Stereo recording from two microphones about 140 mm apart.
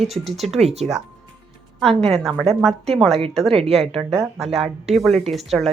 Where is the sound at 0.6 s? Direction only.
50° right (ahead or behind).